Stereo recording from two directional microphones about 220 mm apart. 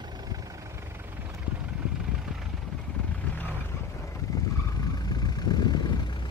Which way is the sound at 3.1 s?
10° left (ahead or behind).